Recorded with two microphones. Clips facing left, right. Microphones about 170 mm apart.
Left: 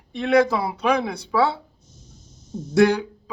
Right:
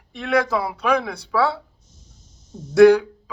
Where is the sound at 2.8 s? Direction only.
20° left (ahead or behind).